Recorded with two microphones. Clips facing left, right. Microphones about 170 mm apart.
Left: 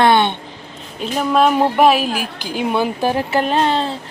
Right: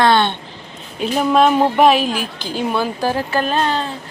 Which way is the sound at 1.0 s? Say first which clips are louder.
Right 1 dB; centre (ahead or behind).